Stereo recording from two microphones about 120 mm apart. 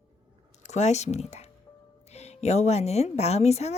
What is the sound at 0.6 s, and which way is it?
Speech, 70° left (ahead or behind).